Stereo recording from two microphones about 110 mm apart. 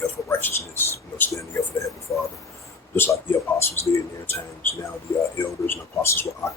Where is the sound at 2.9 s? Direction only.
20° left (ahead or behind).